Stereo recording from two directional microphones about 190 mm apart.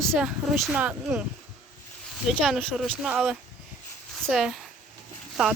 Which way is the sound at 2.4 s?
Centre (ahead or behind).